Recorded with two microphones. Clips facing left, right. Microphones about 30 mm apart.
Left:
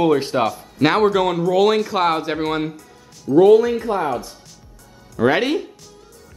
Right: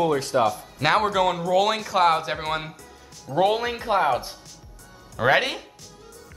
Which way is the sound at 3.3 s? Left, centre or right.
Right.